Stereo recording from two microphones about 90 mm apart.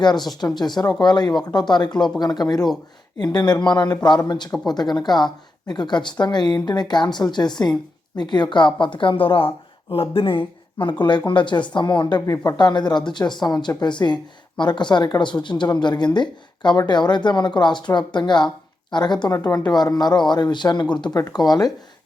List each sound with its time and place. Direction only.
0.0 s speech: 55° left (ahead or behind)